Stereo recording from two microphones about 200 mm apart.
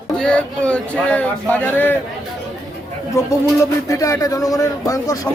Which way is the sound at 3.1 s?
15° left (ahead or behind).